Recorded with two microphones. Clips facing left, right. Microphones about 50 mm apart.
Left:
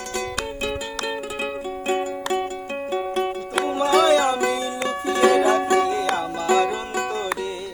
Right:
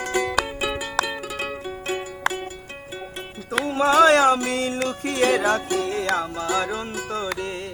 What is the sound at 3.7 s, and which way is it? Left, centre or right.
Music, right.